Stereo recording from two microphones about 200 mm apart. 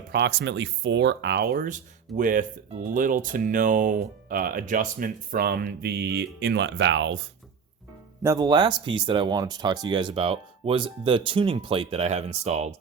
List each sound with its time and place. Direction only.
0.1 s speech: 55° right (ahead or behind)
8.2 s speech: 15° right (ahead or behind); by 12.7 s 35° right (ahead or behind)